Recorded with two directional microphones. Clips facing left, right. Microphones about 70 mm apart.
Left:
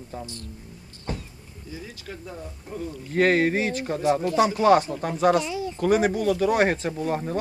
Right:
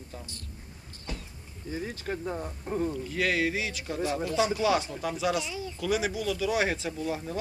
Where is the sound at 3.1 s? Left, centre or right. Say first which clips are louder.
Left 11 dB; left.